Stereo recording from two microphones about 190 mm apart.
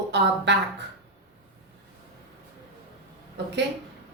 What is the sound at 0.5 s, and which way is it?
Speech, 65° right (ahead or behind).